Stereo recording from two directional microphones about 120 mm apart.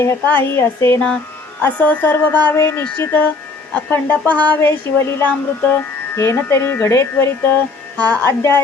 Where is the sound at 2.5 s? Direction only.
25° left (ahead or behind).